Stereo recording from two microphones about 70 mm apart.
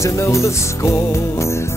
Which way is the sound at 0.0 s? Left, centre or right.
Left.